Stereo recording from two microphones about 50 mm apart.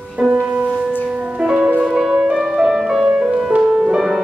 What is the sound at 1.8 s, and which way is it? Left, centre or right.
Music, centre.